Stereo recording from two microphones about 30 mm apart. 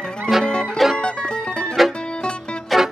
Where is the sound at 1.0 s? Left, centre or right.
Left.